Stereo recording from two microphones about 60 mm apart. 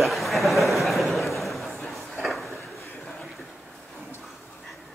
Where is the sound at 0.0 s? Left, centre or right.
Centre.